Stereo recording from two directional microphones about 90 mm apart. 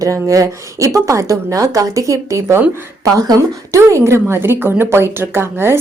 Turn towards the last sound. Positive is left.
turn(degrees=-25)  # may be behind; listen again after turning